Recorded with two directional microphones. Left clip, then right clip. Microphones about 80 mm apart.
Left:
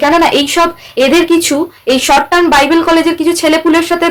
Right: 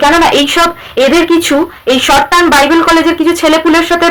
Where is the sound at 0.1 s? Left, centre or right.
Left.